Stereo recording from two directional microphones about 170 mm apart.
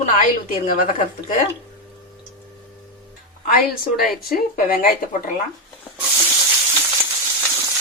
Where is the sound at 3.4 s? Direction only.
60° left (ahead or behind).